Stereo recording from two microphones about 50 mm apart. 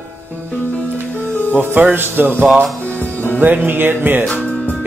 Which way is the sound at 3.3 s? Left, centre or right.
Right.